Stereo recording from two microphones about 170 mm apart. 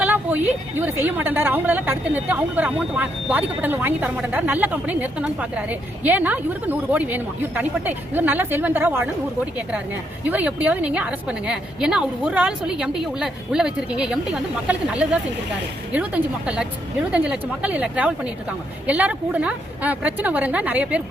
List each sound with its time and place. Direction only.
0.0 s a woman's voice: 10° right (ahead or behind)
10.2 s a woman's voice: 10° right (ahead or behind)